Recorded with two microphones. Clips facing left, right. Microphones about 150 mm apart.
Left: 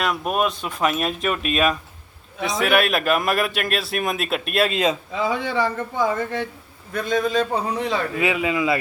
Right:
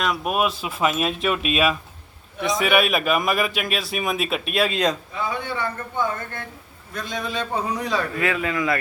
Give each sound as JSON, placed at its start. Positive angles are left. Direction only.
{"t": 0.0, "sound": "a man's voice", "side_deg": 0}
{"t": 2.4, "sound": "a man's voice", "side_deg": 0}
{"t": 5.1, "sound": "speech", "side_deg": 90}
{"t": 6.9, "sound": "a man's voice", "side_deg": 50}
{"t": 7.7, "sound": "a man's voice", "side_deg": 25}